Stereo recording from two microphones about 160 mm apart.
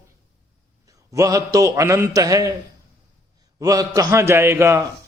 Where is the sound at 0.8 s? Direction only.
20° right (ahead or behind).